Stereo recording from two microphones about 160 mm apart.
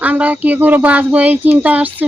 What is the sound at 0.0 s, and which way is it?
Speech, 10° right (ahead or behind).